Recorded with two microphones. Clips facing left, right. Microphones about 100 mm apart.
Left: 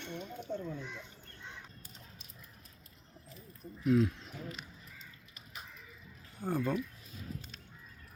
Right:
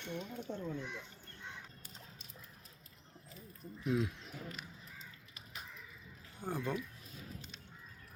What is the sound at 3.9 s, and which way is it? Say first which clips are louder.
Speech: left 7 dB; 15° right (ahead or behind).